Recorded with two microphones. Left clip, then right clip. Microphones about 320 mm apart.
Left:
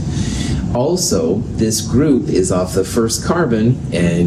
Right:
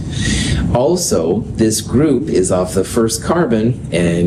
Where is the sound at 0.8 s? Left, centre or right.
Right.